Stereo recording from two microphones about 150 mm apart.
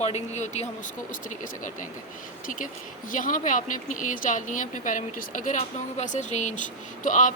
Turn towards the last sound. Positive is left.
turn(degrees=55)  # may be behind; listen again after turning